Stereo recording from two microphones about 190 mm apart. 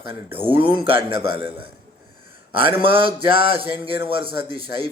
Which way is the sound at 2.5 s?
30° right (ahead or behind).